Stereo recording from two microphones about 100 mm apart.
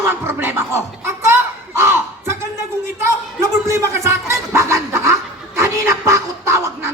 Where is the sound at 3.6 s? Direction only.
30° right (ahead or behind).